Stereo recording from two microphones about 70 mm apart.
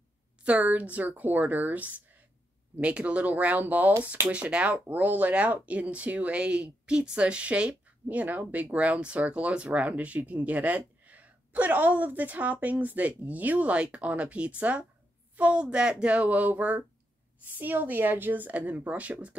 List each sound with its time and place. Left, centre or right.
0.4 s speech: right